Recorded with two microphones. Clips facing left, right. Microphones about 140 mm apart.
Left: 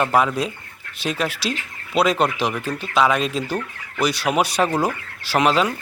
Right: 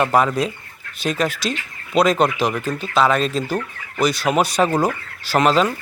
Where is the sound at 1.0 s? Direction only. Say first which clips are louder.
Right 2 dB; 5° left (ahead or behind).